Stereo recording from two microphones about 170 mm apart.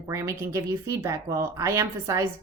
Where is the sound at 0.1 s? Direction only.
15° right (ahead or behind).